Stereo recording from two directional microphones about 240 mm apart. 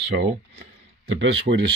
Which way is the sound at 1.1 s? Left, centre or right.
Right.